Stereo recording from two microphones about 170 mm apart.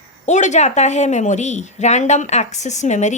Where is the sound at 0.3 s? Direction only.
45° left (ahead or behind).